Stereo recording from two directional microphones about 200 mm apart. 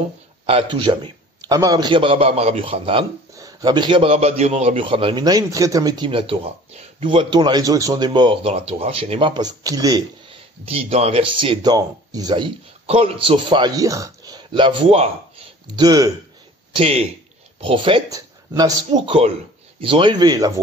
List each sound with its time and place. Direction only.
0.5 s a man's voice: 25° right (ahead or behind)
10.6 s a man's voice: 30° right (ahead or behind)